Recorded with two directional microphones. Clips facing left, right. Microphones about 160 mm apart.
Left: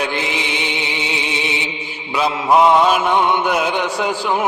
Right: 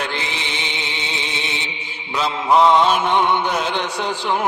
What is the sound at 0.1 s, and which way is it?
Music, 10° left (ahead or behind).